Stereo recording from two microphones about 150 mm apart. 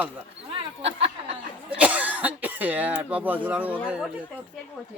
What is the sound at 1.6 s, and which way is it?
Cough, 10° right (ahead or behind).